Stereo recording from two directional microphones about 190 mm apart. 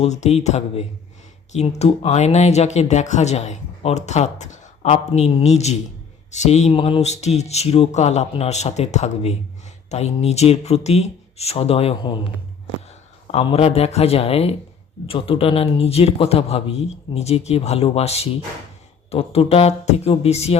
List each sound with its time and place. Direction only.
0.0 s a man's voice: 35° left (ahead or behind)